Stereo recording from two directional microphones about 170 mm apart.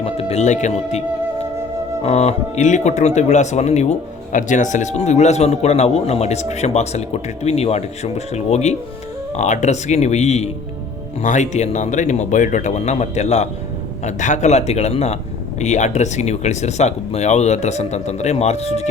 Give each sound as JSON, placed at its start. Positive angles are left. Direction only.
{"t": 0.0, "sound": "speech", "side_deg": 35}
{"t": 2.0, "sound": "speech", "side_deg": 40}